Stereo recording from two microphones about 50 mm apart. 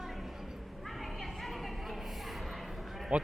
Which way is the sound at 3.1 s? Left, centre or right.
Right.